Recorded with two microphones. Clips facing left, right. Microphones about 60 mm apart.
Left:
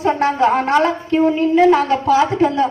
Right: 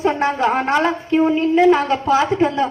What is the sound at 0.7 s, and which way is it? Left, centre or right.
A woman's voice, centre.